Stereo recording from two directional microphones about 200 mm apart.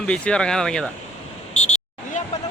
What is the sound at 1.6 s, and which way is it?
Vehicle, 35° left (ahead or behind).